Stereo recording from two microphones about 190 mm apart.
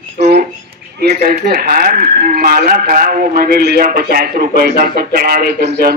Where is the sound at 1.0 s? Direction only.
55° right (ahead or behind).